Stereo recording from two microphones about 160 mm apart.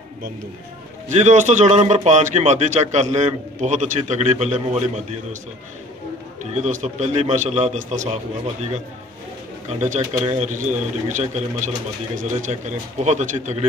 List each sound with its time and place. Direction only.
1.0 s a man's voice: 45° right (ahead or behind)
6.5 s a man's voice: 45° right (ahead or behind)
9.7 s a man's voice: 45° right (ahead or behind)